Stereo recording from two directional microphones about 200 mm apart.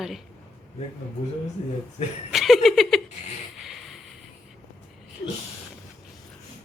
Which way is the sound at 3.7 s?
Centre (ahead or behind).